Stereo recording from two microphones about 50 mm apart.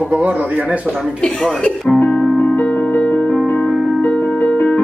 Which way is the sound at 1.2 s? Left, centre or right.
Centre.